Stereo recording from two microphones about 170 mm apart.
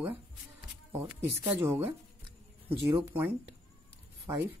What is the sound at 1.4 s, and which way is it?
Speech, 10° right (ahead or behind).